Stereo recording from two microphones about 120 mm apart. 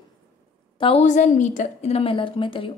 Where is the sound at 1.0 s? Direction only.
80° left; by 2.6 s 45° left (ahead or behind).